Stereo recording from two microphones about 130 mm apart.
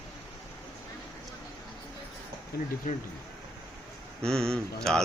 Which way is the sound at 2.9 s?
90° left.